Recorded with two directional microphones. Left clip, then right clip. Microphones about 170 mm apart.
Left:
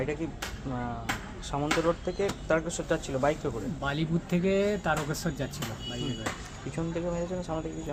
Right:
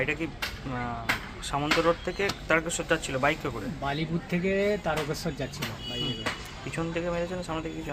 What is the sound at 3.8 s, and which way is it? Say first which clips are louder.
Speech: right 1 dB; 40° left (ahead or behind).